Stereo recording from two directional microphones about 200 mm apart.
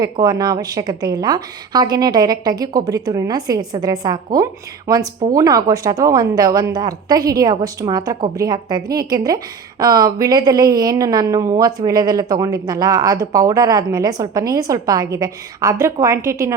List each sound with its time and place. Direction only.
0.0 s a woman's voice: 20° right (ahead or behind)